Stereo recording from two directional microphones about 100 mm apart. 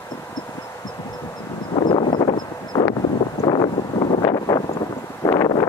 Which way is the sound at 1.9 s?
55° left (ahead or behind).